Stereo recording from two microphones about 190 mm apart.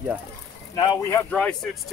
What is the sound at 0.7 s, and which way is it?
Speech, 20° left (ahead or behind).